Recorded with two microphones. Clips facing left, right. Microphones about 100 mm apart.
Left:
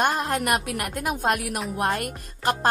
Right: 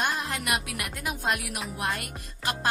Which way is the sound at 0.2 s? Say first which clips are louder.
Left 6 dB; 50° left (ahead or behind).